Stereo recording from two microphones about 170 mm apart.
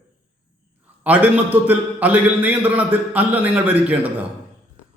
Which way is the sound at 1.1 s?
10° right (ahead or behind).